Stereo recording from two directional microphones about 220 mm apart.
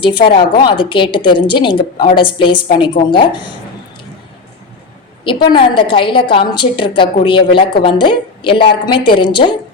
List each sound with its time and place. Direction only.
0.0 s a woman's voice: 20° left (ahead or behind)
5.5 s a woman's voice: 20° left (ahead or behind)